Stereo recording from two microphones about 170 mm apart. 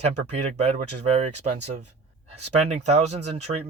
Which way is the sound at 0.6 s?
35° right (ahead or behind).